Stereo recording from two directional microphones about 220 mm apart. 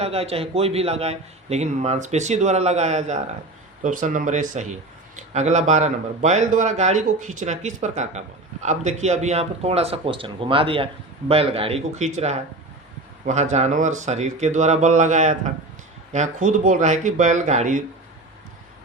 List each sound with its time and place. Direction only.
0.0 s a man's voice: 30° right (ahead or behind)